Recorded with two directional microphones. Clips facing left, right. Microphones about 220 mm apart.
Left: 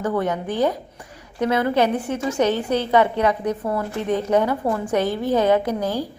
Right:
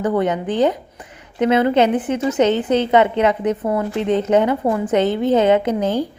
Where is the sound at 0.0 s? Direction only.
20° right (ahead or behind).